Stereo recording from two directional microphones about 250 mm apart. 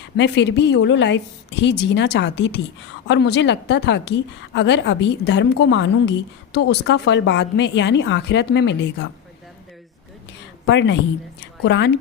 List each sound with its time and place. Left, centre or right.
0.2 s a woman's voice: left
10.7 s a woman's voice: left